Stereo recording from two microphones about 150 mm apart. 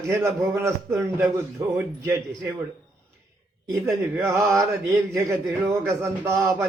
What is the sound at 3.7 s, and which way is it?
A man's voice, 20° right (ahead or behind).